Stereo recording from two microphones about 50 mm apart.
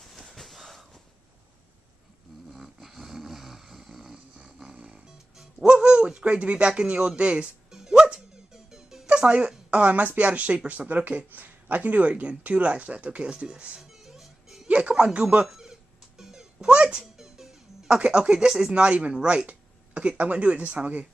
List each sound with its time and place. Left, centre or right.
0.0 s a sound: centre
2.5 s a sound: centre
4.7 s music: right
5.7 s speech: right
7.7 s dog: centre
9.0 s speech: right
13.7 s music: centre
14.7 s speech: right
15.4 s a sound: centre
17.0 s music: centre
17.8 s speech: centre